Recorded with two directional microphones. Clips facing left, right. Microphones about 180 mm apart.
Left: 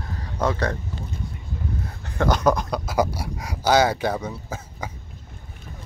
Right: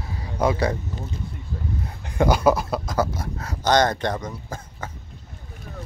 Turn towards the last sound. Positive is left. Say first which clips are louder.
# left 1 dB
turn(degrees=10)  # may be behind; listen again after turning